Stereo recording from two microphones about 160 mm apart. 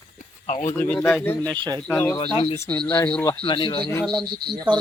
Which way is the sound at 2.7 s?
10° left (ahead or behind).